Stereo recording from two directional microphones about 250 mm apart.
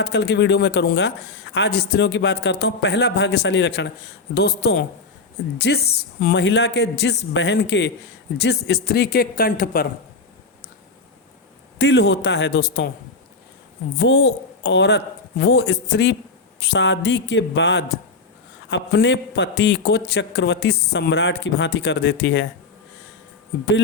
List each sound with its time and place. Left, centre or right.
0.0 s speech: left
11.8 s speech: left
14.0 s speech: left